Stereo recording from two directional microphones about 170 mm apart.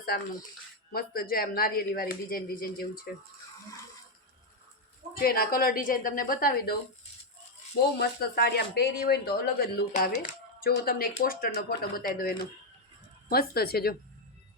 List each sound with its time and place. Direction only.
0.9 s speech: 60° left (ahead or behind)
5.2 s speech: 60° left (ahead or behind)
7.9 s speech: 70° left (ahead or behind)
9.9 s speech: 45° left (ahead or behind)
10.6 s speech: 60° left (ahead or behind)